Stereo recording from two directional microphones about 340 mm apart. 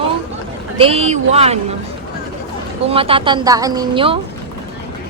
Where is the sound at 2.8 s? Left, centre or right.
Centre.